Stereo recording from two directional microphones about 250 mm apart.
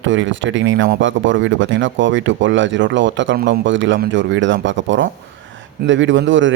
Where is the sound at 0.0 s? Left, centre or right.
Right.